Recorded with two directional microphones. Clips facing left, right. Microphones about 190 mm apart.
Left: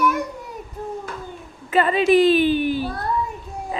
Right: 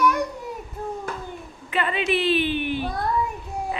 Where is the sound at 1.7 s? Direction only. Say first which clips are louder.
Left 7 dB; 40° left (ahead or behind).